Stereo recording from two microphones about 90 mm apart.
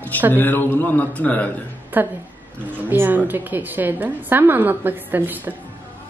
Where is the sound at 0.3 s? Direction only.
20° left (ahead or behind).